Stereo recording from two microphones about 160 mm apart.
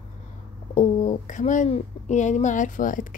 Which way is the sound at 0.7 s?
45° left (ahead or behind).